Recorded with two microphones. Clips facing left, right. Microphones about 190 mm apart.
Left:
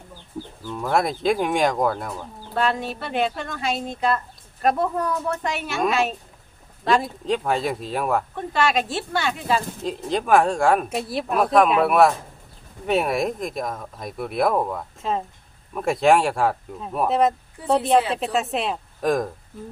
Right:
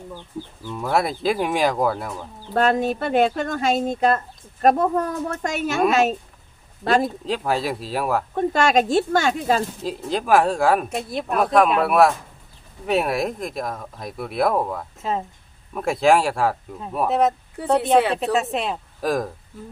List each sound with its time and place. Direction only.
0.7 s speech: 5° right (ahead or behind)
2.5 s speech: 45° right (ahead or behind)
7.3 s speech: centre (ahead or behind)
8.4 s speech: 45° right (ahead or behind)
9.8 s speech: centre (ahead or behind)